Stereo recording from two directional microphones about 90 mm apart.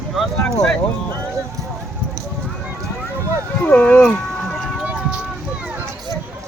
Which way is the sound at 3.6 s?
15° left (ahead or behind).